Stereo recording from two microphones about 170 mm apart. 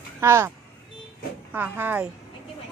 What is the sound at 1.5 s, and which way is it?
Speech, 10° right (ahead or behind).